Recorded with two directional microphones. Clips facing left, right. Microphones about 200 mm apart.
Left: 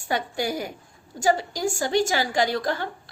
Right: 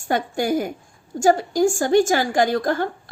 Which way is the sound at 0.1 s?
50° right (ahead or behind).